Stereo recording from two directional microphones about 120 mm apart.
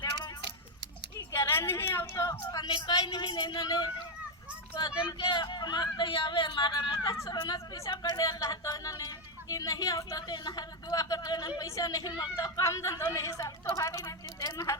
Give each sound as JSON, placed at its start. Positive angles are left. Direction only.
{"t": 1.3, "sound": "a woman's voice", "side_deg": 20}
{"t": 2.6, "sound": "a woman's voice", "side_deg": 40}